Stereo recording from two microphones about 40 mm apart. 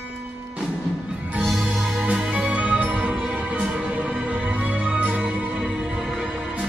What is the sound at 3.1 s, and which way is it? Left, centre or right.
Music, centre.